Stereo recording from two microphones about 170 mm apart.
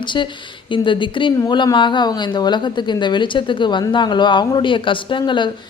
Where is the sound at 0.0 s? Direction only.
25° left (ahead or behind).